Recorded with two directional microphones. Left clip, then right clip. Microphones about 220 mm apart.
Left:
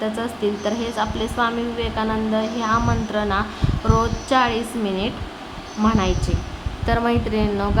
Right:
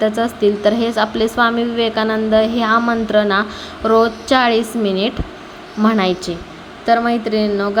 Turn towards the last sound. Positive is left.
turn(degrees=-15)  # may be behind; listen again after turning